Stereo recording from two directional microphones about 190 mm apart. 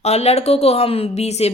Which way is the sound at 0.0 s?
35° left (ahead or behind).